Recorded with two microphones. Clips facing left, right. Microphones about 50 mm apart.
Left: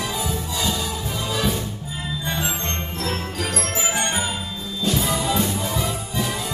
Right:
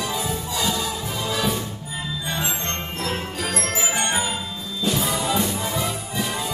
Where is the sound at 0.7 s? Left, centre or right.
Centre.